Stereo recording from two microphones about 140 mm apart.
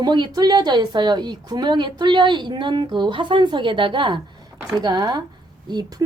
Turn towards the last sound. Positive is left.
turn(degrees=-30)  # may be behind; listen again after turning